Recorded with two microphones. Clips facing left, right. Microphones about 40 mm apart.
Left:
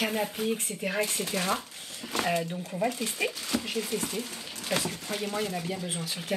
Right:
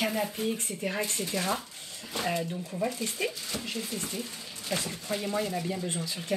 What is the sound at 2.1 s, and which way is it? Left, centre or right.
Speech, left.